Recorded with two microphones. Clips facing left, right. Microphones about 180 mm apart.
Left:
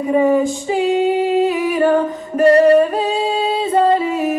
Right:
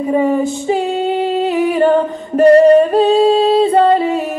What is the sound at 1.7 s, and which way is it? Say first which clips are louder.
A capella: right 2 dB; 30° right (ahead or behind).